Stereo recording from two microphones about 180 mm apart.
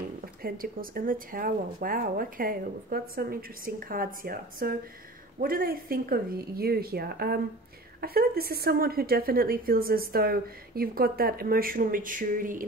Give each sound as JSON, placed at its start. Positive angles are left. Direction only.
{"t": 0.4, "sound": "a woman's voice", "side_deg": -55}